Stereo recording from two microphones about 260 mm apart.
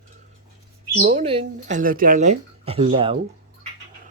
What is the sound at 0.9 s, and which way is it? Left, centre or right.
Speech, right.